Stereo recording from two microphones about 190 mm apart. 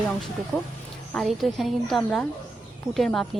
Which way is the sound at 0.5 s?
10° left (ahead or behind).